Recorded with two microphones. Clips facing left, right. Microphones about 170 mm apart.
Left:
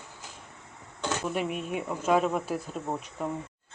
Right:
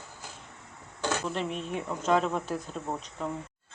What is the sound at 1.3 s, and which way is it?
Speech, 10° left (ahead or behind).